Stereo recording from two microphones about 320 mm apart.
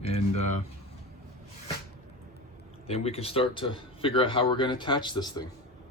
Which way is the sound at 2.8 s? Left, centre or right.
Centre.